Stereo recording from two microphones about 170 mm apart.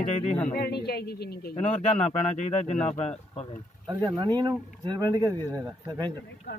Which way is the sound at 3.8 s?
25° right (ahead or behind).